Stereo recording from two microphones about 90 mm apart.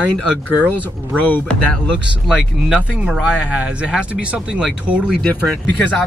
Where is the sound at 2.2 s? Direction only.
5° right (ahead or behind).